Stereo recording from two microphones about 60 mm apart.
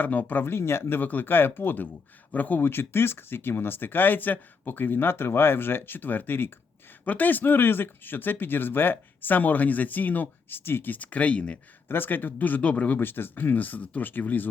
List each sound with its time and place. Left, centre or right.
0.0 s speech: left
2.6 s speech: left; by 11.6 s centre
11.9 s speech: left
13.0 s speech: left